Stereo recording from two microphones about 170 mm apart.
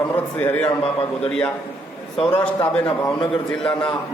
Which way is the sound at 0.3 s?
10° left (ahead or behind).